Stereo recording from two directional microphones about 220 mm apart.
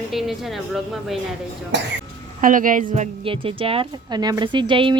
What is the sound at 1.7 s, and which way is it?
Speech, 55° right (ahead or behind).